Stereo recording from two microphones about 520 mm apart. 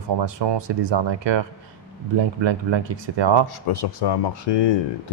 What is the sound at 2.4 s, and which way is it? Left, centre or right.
Speech, right.